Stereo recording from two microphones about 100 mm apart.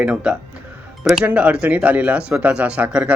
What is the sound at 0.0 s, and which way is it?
Speech, 10° right (ahead or behind).